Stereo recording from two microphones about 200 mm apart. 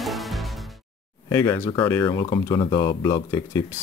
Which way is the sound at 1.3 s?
15° left (ahead or behind).